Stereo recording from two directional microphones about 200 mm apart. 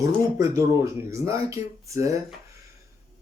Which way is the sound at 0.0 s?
15° right (ahead or behind).